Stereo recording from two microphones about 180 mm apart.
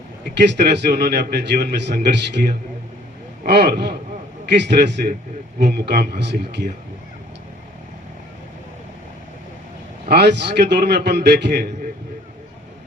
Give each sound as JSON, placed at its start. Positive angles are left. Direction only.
{"t": 0.3, "sound": "a man's voice", "side_deg": -70}
{"t": 10.1, "sound": "a man's voice", "side_deg": -70}